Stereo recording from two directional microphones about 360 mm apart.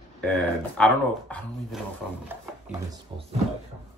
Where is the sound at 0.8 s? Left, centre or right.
Centre.